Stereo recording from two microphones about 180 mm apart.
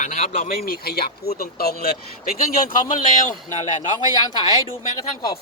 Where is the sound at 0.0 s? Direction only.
45° left (ahead or behind).